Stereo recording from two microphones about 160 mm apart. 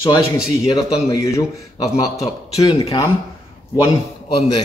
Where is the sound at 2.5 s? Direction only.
35° left (ahead or behind).